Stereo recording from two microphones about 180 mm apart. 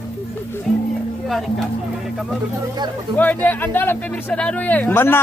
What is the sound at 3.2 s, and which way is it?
Speech, 10° left (ahead or behind).